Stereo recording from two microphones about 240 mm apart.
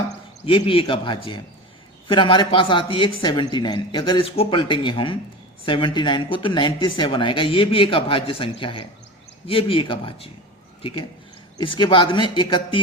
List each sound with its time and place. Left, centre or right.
0.4 s speech: left
11.5 s speech: centre